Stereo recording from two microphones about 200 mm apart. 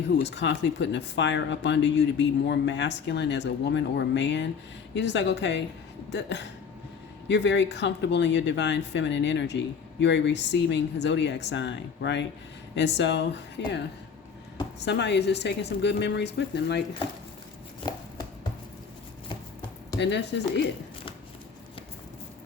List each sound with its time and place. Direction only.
0.2 s speech: 60° left (ahead or behind)
14.8 s speech: 60° left (ahead or behind)
20.0 s speech: 60° left (ahead or behind)